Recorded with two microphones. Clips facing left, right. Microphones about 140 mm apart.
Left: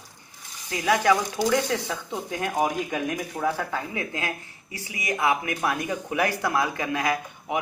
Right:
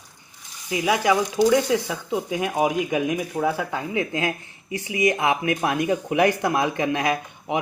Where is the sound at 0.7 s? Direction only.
10° right (ahead or behind).